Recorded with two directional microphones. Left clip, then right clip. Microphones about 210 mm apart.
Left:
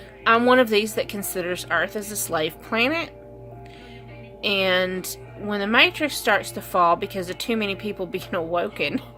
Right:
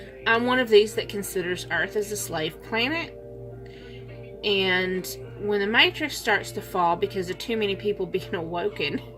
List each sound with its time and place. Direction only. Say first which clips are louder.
0.3 s speech: left 4 dB; 50° left (ahead or behind)
4.4 s speech: left 2 dB; 50° left (ahead or behind)